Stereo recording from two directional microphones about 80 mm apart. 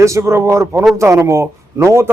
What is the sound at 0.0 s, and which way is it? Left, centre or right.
A man's voice, right.